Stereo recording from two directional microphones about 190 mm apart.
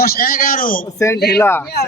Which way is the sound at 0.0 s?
50° left (ahead or behind).